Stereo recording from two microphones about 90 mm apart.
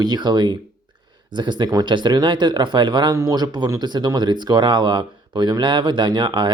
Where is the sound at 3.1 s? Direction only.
40° right (ahead or behind).